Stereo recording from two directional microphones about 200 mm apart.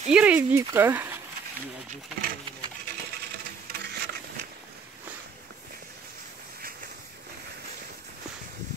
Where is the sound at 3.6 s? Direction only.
55° right (ahead or behind).